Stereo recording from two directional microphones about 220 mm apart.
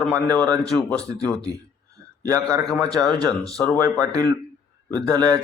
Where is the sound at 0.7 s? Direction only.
5° left (ahead or behind).